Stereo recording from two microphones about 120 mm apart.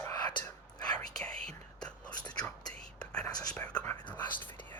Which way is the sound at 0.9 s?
10° left (ahead or behind).